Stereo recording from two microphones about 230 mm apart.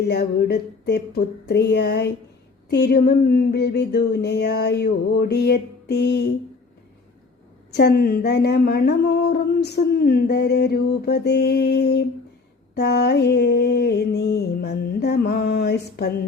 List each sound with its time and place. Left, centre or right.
0.0 s speech: left
7.7 s speech: left